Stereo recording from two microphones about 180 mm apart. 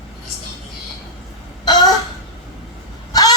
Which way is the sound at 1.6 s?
25° left (ahead or behind).